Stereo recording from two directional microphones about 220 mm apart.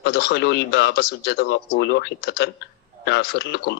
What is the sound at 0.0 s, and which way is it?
Speech, 50° left (ahead or behind).